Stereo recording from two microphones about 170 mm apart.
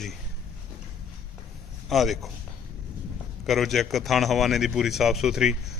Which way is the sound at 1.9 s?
Centre (ahead or behind).